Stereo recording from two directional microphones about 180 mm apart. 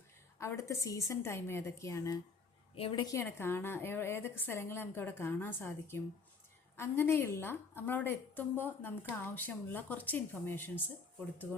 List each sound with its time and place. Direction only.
0.3 s a woman's voice: 15° left (ahead or behind)
2.7 s a woman's voice: 30° left (ahead or behind); by 10.8 s 10° left (ahead or behind)